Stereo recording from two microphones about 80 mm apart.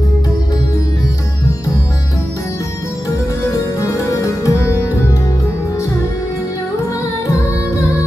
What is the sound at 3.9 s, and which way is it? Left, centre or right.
Music, left.